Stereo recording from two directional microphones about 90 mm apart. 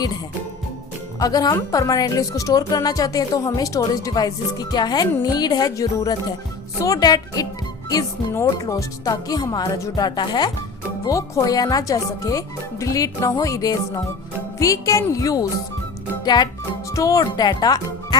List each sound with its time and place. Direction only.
1.2 s speech: 45° left (ahead or behind)
8.3 s speech: 30° left (ahead or behind); by 10.5 s 55° left (ahead or behind)
11.0 s speech: 40° left (ahead or behind)
16.2 s speech: 50° left (ahead or behind)
16.9 s speech: 40° left (ahead or behind)